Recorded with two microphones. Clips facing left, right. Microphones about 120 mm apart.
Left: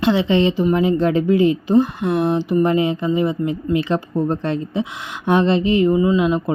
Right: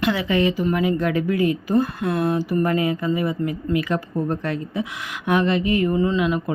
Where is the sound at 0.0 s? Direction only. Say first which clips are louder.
Left 4 dB; 25° left (ahead or behind).